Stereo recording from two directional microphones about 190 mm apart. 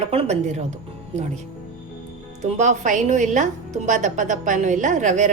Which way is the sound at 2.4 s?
40° right (ahead or behind).